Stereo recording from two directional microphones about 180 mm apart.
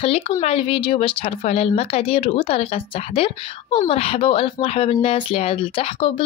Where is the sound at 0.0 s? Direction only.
30° left (ahead or behind).